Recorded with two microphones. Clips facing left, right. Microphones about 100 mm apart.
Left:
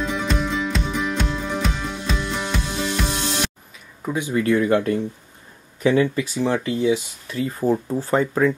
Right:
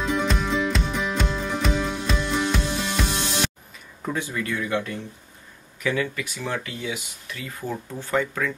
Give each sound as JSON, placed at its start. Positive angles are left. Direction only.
{"t": 0.0, "sound": "music", "side_deg": 0}
{"t": 4.0, "sound": "speech", "side_deg": 15}
{"t": 4.3, "sound": "speech", "side_deg": 40}
{"t": 5.8, "sound": "speech", "side_deg": 30}